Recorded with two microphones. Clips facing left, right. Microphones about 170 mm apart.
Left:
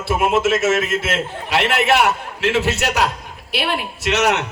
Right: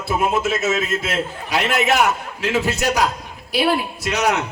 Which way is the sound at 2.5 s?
75° left (ahead or behind).